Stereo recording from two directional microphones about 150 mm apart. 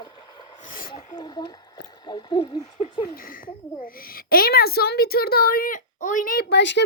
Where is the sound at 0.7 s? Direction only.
70° left (ahead or behind).